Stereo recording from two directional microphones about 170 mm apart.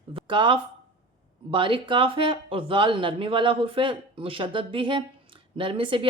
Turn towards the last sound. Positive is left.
turn(degrees=-30)  # may be behind; listen again after turning